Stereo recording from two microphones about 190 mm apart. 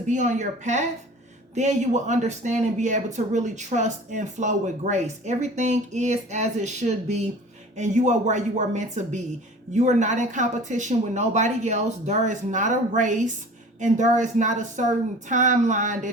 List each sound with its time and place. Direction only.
0.1 s speech: 40° right (ahead or behind)